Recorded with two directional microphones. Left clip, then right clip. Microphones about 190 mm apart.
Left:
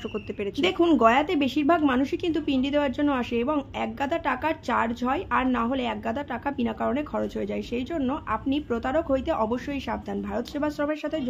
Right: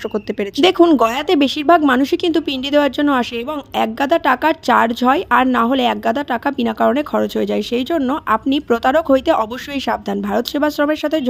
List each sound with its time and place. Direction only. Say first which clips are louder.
0.1 s speech: right 10 dB; 35° right (ahead or behind)